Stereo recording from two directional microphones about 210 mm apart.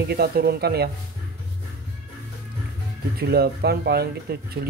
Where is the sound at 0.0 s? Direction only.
50° right (ahead or behind).